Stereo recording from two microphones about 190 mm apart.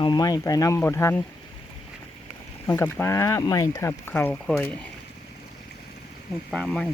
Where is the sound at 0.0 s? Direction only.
20° left (ahead or behind).